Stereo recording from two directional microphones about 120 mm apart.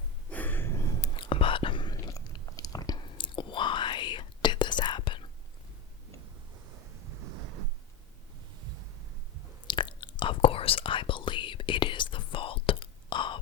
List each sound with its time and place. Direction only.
0.3 s a sound: 15° left (ahead or behind)
1.1 s whispering: 45° left (ahead or behind)
2.0 s chewing: 30° left (ahead or behind)
9.6 s whispering: 40° left (ahead or behind)